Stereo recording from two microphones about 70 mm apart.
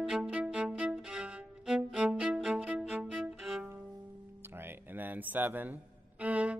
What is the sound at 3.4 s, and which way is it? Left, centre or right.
Music, centre.